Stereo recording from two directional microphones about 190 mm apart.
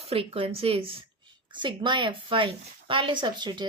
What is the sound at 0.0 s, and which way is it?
A woman's voice, 30° right (ahead or behind).